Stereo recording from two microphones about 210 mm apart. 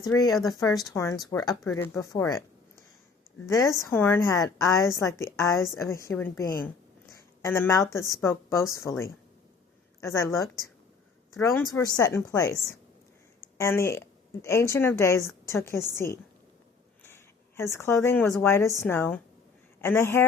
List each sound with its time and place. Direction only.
0.4 s a woman's voice: 15° left (ahead or behind)
3.4 s a woman's voice: 15° left (ahead or behind)
11.8 s a woman's voice: 15° left (ahead or behind)
17.6 s a woman's voice: 10° left (ahead or behind)